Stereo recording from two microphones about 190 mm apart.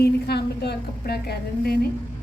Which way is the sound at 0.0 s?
60° left (ahead or behind).